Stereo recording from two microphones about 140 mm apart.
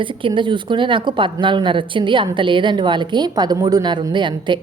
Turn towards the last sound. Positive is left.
turn(degrees=-35)  # may be behind; listen again after turning